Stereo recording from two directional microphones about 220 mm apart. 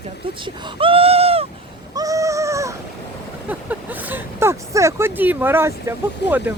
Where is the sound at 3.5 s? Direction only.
5° right (ahead or behind).